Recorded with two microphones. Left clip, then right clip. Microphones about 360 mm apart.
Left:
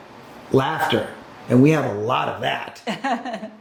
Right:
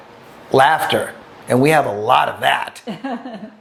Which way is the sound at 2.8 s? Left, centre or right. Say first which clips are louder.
Left 3 dB; left.